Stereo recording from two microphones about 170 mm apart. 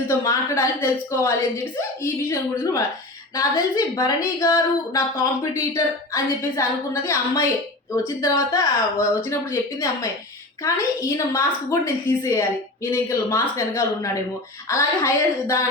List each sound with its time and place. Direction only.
0.1 s a woman's voice: 15° left (ahead or behind)
3.3 s a woman's voice: 20° left (ahead or behind)